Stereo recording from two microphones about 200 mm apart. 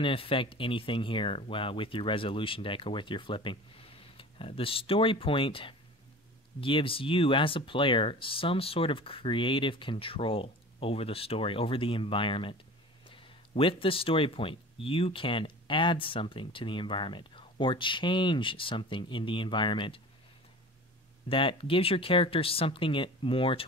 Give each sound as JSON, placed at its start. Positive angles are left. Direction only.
{"t": 0.0, "sound": "speech", "side_deg": 25}
{"t": 21.3, "sound": "speech", "side_deg": 25}